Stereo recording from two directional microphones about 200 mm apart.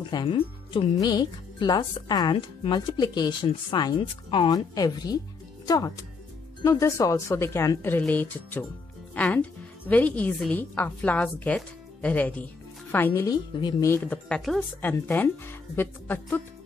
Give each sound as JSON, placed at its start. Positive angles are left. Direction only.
{"t": 0.1, "sound": "a woman's voice", "side_deg": 25}